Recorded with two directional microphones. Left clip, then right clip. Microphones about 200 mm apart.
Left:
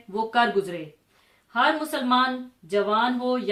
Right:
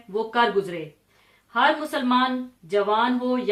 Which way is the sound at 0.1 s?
35° left (ahead or behind).